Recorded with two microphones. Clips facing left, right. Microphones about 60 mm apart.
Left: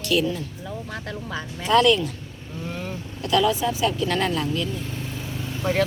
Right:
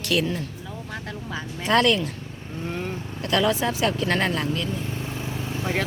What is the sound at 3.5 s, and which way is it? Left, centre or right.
Speech, right.